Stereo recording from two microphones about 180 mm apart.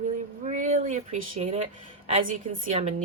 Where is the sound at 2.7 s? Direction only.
35° right (ahead or behind).